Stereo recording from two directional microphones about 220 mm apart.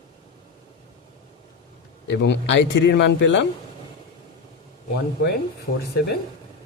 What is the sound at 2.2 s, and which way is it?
Speech, 55° left (ahead or behind).